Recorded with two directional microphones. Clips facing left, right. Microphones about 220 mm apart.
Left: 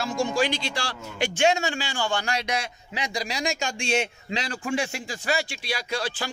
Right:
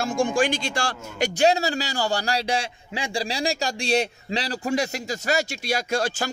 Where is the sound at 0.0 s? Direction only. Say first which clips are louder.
Right 3 dB; 50° right (ahead or behind).